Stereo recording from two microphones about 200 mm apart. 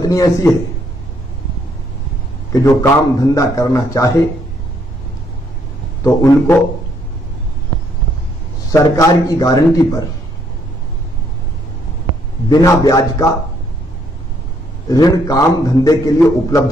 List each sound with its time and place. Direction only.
0.0 s a man's voice: 15° left (ahead or behind)
2.5 s a man's voice: 15° left (ahead or behind)
6.0 s a man's voice: 15° left (ahead or behind)
8.6 s a man's voice: 15° left (ahead or behind)
12.4 s a man's voice: 20° left (ahead or behind)
14.9 s a man's voice: 20° left (ahead or behind)